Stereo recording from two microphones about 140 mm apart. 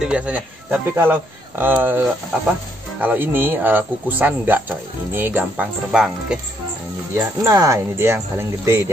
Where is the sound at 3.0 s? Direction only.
15° right (ahead or behind).